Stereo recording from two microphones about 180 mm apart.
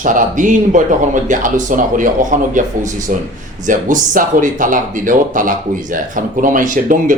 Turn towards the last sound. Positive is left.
turn(degrees=-45)  # may be behind; listen again after turning